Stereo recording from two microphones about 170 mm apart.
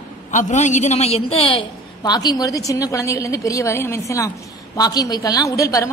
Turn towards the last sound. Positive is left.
turn(degrees=20)  # may be behind; listen again after turning